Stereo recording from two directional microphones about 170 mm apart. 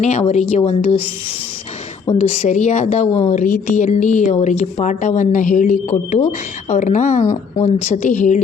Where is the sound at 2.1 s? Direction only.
40° left (ahead or behind).